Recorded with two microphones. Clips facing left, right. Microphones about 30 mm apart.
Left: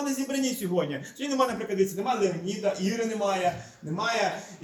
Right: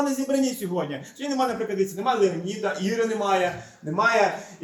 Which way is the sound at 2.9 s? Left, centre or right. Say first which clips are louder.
Right 4 dB; centre.